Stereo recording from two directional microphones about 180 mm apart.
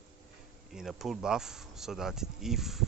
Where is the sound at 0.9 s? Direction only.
Centre (ahead or behind).